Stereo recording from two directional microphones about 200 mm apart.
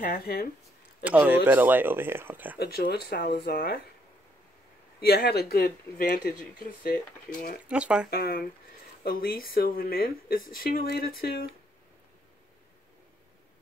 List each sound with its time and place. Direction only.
0.0 s speech: 45° left (ahead or behind)
1.0 s speech: 5° right (ahead or behind)
2.6 s speech: 50° left (ahead or behind)
5.0 s speech: 50° left (ahead or behind)
7.6 s speech: 5° right (ahead or behind)
8.1 s speech: 50° left (ahead or behind)